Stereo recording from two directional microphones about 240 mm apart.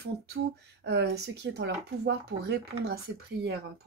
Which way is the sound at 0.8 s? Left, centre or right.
Right.